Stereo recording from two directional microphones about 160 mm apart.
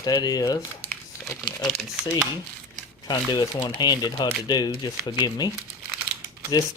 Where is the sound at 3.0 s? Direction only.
25° left (ahead or behind).